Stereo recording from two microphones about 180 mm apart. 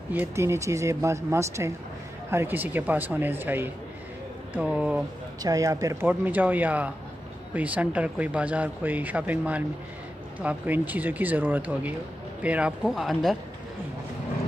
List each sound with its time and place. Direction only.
0.1 s speech: 10° right (ahead or behind)
5.4 s speech: 20° right (ahead or behind); by 13.4 s centre (ahead or behind)